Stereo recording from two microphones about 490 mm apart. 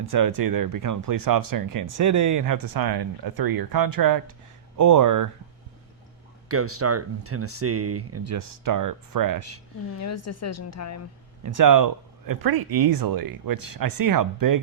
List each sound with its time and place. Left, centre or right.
0.0 s speech: right
6.5 s speech: right
8.2 s speech: right
10.0 s a woman's voice: left
11.4 s speech: right